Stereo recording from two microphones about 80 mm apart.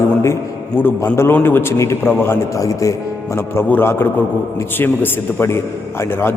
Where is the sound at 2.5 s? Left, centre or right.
Left.